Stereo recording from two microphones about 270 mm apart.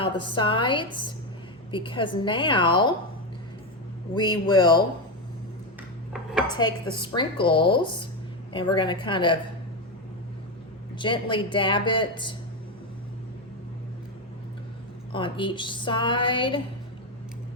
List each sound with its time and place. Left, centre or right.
0.0 s speech: centre
4.1 s speech: centre
6.6 s speech: centre
10.9 s speech: centre
15.1 s speech: centre